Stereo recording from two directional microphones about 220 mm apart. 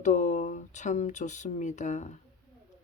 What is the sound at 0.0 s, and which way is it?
Speech, 35° left (ahead or behind).